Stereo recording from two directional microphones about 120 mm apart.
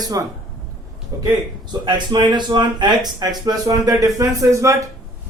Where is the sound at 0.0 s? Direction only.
30° right (ahead or behind).